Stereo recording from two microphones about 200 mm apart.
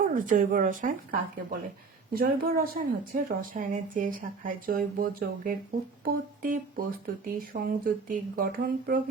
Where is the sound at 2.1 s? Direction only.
45° right (ahead or behind).